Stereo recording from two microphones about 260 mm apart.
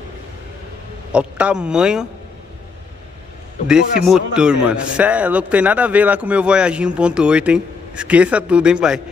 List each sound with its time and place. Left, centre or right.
1.1 s a man's voice: centre
3.6 s a man's voice: centre